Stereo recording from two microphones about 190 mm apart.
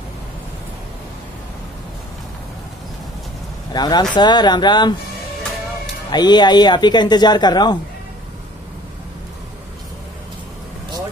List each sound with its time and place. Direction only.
3.7 s speech: 20° left (ahead or behind)
6.0 s speech: 20° left (ahead or behind)